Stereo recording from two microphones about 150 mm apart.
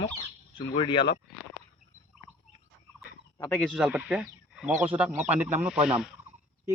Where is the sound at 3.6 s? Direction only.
Centre (ahead or behind).